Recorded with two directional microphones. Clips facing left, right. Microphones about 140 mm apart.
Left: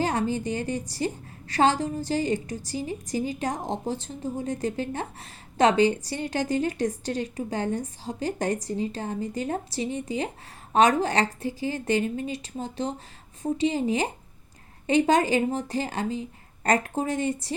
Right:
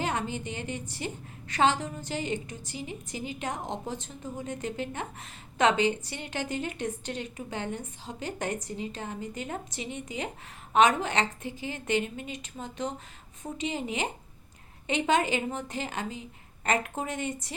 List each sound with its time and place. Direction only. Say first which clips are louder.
0.0 s a woman's voice: left 6 dB; 35° left (ahead or behind)